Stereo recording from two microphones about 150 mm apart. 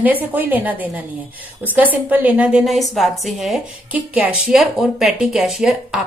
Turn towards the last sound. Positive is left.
turn(degrees=-5)  # may be behind; listen again after turning